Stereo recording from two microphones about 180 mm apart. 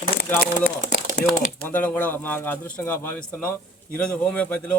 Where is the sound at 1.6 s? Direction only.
10° left (ahead or behind).